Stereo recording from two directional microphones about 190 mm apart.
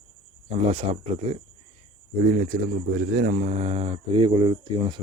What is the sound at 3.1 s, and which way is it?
Speech, 50° right (ahead or behind).